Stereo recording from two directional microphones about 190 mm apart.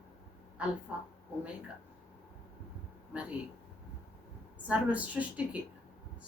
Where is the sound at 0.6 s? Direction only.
5° right (ahead or behind).